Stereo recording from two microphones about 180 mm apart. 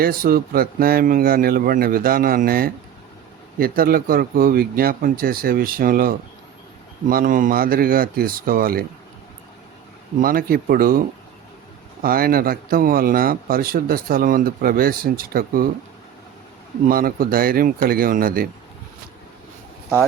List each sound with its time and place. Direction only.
0.0 s a man's voice: 55° right (ahead or behind)
10.2 s a man's voice: 55° right (ahead or behind)
12.0 s a man's voice: 55° right (ahead or behind)
16.9 s a man's voice: 55° right (ahead or behind)